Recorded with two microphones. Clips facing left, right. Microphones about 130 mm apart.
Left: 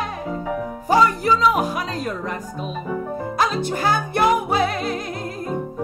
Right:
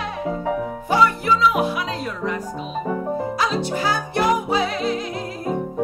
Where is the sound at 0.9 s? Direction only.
40° left (ahead or behind).